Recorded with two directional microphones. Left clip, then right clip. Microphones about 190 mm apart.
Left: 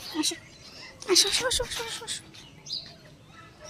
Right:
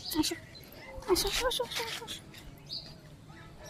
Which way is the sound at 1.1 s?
10° left (ahead or behind).